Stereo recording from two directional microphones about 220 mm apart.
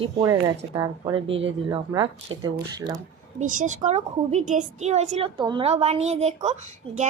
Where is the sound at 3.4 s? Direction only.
35° right (ahead or behind).